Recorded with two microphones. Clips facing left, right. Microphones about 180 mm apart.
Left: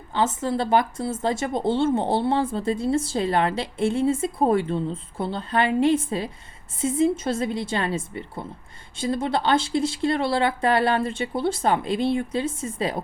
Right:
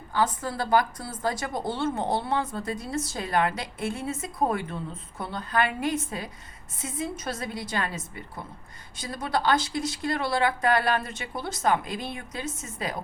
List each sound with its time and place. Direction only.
0.1 s speech: 25° left (ahead or behind)